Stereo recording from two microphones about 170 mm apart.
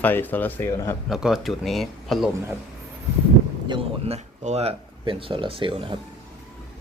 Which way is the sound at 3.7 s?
35° right (ahead or behind).